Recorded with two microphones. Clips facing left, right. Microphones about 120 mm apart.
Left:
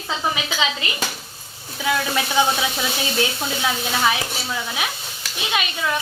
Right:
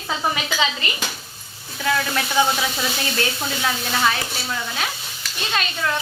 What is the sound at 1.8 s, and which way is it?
A woman's voice, 10° left (ahead or behind).